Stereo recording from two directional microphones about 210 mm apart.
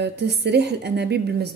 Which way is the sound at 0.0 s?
55° right (ahead or behind).